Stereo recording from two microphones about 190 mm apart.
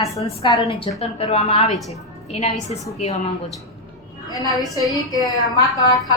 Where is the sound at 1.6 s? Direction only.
Centre (ahead or behind).